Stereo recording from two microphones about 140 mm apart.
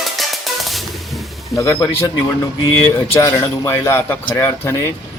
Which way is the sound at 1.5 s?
20° left (ahead or behind).